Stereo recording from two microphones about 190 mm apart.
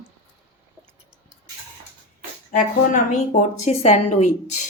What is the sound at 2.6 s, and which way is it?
A woman's voice, 40° left (ahead or behind).